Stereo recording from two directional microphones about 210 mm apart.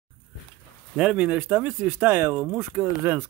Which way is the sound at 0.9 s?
5° right (ahead or behind).